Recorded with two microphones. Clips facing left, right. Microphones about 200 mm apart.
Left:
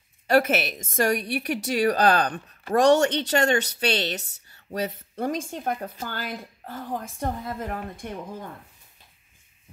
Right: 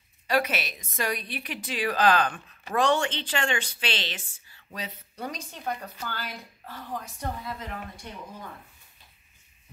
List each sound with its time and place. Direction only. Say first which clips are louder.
0.3 s speech: left 6 dB; 50° left (ahead or behind)